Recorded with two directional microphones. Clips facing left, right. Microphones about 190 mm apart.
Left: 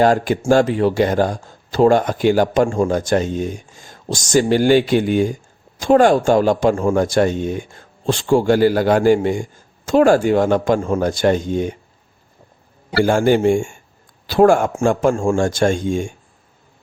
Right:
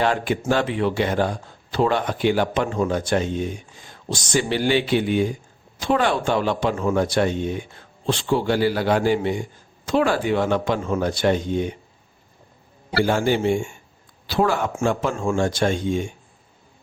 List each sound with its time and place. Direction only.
0.0 s a man's voice: 40° left (ahead or behind)
13.0 s a man's voice: 50° left (ahead or behind)